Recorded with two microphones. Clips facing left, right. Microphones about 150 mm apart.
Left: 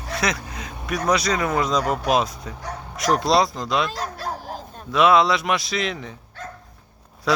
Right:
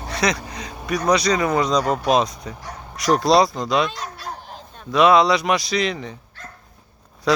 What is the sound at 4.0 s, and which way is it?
Dog, 40° left (ahead or behind).